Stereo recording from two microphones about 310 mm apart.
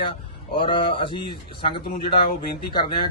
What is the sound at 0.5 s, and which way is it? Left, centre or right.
Speech, centre.